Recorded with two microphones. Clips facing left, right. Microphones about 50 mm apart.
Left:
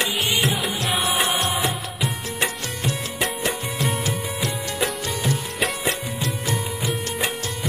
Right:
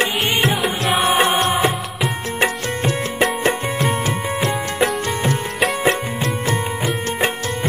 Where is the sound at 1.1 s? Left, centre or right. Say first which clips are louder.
Right 6 dB; right.